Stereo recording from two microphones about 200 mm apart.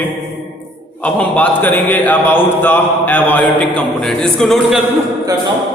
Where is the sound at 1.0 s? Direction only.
5° left (ahead or behind).